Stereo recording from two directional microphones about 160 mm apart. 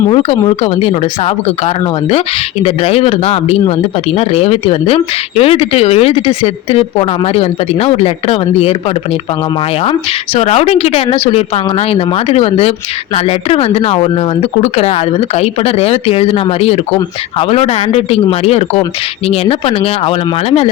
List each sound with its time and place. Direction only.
0.1 s speech: 35° left (ahead or behind)
10.3 s speech: 40° left (ahead or behind)